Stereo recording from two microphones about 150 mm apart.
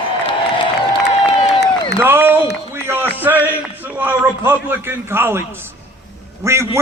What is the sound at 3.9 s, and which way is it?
A man's voice, 15° right (ahead or behind).